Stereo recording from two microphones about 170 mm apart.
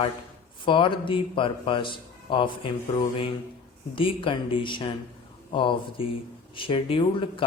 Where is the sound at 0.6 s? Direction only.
30° left (ahead or behind).